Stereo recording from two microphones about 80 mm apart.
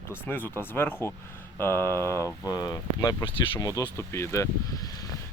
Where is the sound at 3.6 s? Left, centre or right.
Left.